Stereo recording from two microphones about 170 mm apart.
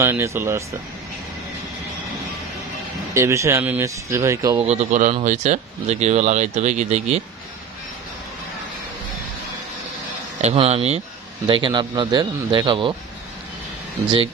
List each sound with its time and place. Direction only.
0.0 s speech: 15° right (ahead or behind)
3.2 s speech: 15° right (ahead or behind)
4.6 s speech: 40° right (ahead or behind)
10.4 s speech: 35° right (ahead or behind)
11.4 s a man's voice: 30° right (ahead or behind)